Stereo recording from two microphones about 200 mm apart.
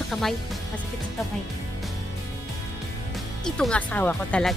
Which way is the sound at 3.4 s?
5° left (ahead or behind).